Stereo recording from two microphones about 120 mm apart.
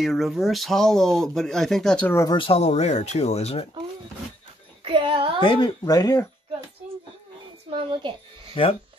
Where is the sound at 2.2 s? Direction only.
45° left (ahead or behind).